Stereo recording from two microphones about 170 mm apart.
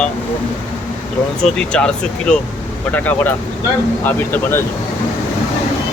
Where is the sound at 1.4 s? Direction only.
5° left (ahead or behind).